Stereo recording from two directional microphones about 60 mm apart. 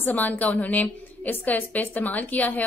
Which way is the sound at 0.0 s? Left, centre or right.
Left.